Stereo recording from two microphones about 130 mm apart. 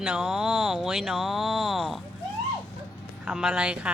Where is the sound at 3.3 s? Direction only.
5° right (ahead or behind).